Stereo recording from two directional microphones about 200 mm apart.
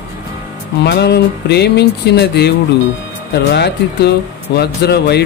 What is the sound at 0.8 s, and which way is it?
Music, 55° left (ahead or behind).